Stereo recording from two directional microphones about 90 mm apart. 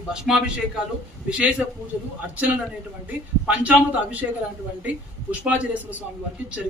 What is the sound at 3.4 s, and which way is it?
Speech, 15° right (ahead or behind).